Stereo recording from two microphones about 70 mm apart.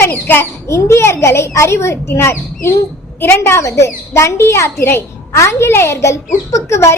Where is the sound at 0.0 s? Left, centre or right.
Left.